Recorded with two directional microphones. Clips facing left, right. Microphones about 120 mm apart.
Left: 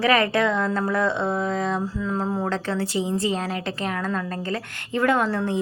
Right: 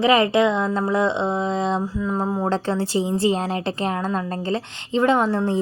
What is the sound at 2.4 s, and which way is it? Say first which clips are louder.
A woman's voice: right 3 dB; 30° right (ahead or behind).